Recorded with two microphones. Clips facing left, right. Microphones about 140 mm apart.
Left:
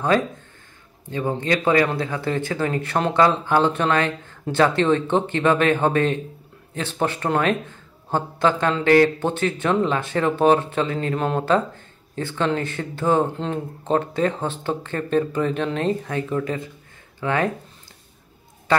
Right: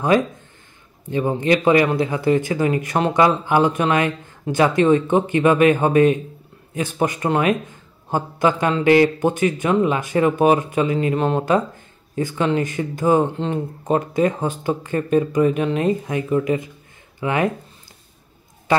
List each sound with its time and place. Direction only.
1.4 s a man's voice: 15° right (ahead or behind)